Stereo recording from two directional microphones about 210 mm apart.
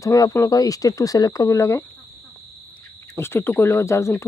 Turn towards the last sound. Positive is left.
turn(degrees=15)  # may be behind; listen again after turning